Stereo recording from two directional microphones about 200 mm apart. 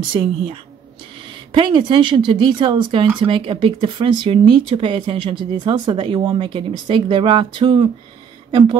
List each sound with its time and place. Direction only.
0.1 s speech: 25° right (ahead or behind)